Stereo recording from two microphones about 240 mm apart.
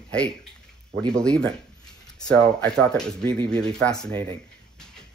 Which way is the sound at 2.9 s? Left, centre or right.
Centre.